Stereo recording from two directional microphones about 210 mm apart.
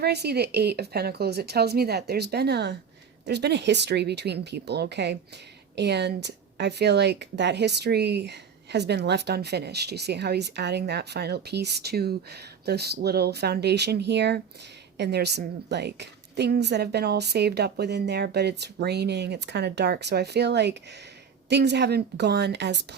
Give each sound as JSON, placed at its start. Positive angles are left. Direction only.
{"t": 0.0, "sound": "a woman's voice", "side_deg": -50}